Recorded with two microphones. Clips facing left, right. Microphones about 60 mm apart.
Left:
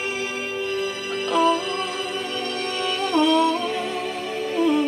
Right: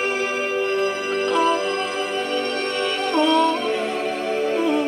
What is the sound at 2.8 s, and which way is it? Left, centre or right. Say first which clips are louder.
Music: even; centre.